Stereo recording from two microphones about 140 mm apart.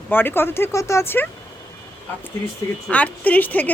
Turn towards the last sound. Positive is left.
turn(degrees=10)  # may be behind; listen again after turning